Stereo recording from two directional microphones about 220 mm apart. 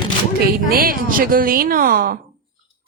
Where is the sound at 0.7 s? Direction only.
40° right (ahead or behind).